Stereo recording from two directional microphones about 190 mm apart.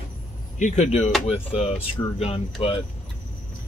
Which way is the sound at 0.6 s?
40° left (ahead or behind).